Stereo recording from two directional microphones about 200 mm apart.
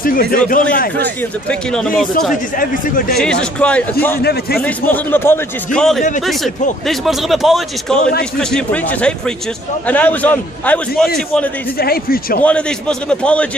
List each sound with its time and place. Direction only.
0.3 s speech: 45° left (ahead or behind)
1.5 s speech: 5° left (ahead or behind)
2.6 s speech: 45° left (ahead or behind)
3.2 s speech: 5° left (ahead or behind)
4.2 s speech: 55° left (ahead or behind)
4.6 s a man's voice: 10° left (ahead or behind)
11.8 s speech: 50° left (ahead or behind)
12.4 s speech: 5° left (ahead or behind)